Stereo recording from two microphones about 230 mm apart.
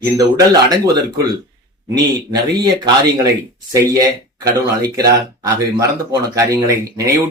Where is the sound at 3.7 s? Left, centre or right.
Centre.